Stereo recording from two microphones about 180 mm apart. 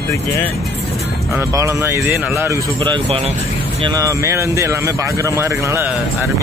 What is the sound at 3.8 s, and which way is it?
Speech, 20° right (ahead or behind).